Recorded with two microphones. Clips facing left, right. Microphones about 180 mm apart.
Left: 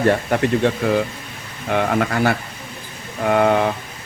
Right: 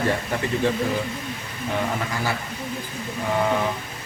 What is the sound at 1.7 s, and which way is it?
Speech, 70° left (ahead or behind).